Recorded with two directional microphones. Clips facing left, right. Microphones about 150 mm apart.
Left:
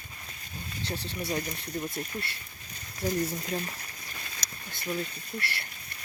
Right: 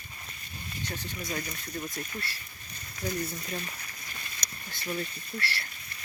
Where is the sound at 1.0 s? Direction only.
30° left (ahead or behind).